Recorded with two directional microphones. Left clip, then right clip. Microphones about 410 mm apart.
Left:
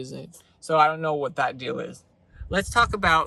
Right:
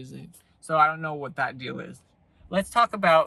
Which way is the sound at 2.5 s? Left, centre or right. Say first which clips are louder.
Left 1 dB; centre.